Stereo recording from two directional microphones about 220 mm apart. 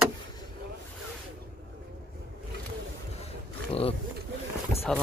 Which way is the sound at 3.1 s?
25° left (ahead or behind).